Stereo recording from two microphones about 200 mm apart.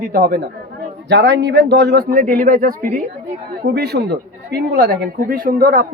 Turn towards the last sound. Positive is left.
turn(degrees=-50)  # may be behind; listen again after turning